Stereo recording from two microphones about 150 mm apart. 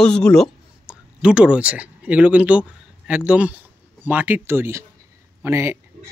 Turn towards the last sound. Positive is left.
turn(degrees=-15)  # may be behind; listen again after turning